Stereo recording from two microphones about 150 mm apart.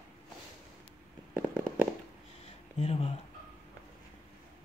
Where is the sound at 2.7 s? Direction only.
40° left (ahead or behind).